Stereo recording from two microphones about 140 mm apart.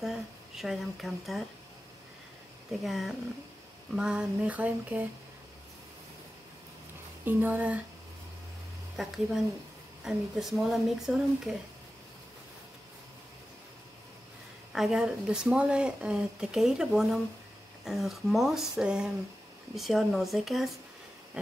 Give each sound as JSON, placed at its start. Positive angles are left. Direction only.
{"t": 0.0, "sound": "speech", "side_deg": 0}
{"t": 2.8, "sound": "speech", "side_deg": 0}
{"t": 7.2, "sound": "speech", "side_deg": -10}
{"t": 8.9, "sound": "speech", "side_deg": -5}
{"t": 14.7, "sound": "speech", "side_deg": -5}